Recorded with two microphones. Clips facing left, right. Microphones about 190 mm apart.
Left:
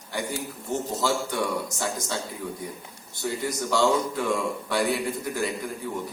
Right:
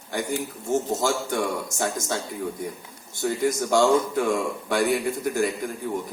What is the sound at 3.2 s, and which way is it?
Speech, 45° right (ahead or behind).